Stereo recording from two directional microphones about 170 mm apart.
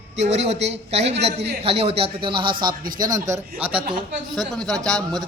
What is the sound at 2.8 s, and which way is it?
Speech, 55° right (ahead or behind).